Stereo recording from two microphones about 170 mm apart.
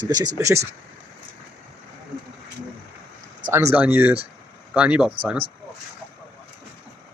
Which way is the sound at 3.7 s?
10° right (ahead or behind).